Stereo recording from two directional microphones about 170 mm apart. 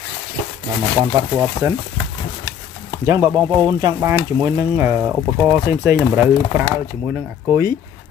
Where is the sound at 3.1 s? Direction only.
15° right (ahead or behind).